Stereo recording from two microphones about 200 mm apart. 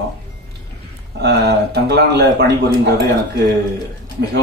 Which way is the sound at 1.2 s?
55° right (ahead or behind).